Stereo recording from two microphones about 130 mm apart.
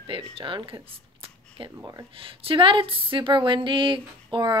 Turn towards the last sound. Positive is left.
turn(degrees=-40)  # may be behind; listen again after turning